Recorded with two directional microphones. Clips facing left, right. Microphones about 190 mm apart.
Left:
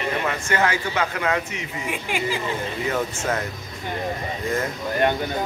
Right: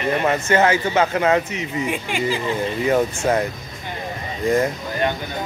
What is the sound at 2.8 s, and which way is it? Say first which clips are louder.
Speech: right 8 dB; 20° right (ahead or behind).